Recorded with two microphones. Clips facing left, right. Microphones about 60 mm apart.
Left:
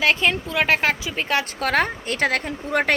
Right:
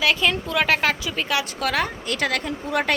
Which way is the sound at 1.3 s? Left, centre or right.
Left.